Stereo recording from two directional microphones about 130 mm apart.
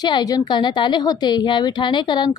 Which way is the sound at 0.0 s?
35° left (ahead or behind).